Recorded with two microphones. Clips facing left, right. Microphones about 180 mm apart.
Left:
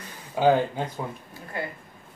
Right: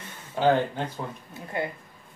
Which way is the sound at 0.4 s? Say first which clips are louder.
Left 2 dB; 10° left (ahead or behind).